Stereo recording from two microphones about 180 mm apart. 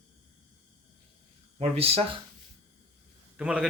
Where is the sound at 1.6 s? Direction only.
35° right (ahead or behind).